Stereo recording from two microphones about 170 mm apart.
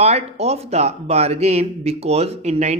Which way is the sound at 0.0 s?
40° right (ahead or behind).